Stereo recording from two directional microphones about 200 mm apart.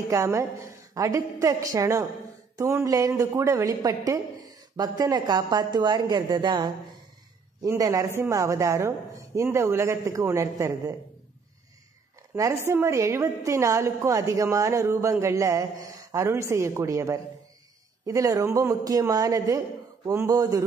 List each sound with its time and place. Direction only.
0.1 s a woman's voice: 15° right (ahead or behind)
12.4 s a woman's voice: 15° right (ahead or behind)